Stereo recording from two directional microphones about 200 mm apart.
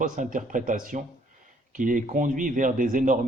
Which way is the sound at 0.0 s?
40° right (ahead or behind).